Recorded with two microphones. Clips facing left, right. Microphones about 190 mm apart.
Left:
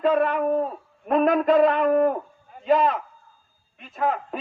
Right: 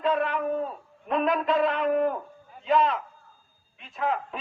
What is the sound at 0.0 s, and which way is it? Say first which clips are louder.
A man's voice: left 5 dB; 50° left (ahead or behind).